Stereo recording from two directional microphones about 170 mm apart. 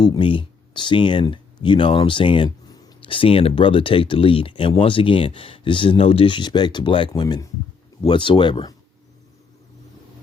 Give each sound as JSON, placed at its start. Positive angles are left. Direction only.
{"t": 0.0, "sound": "speech", "side_deg": 25}